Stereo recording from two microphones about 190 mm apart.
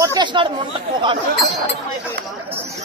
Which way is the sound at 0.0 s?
20° right (ahead or behind).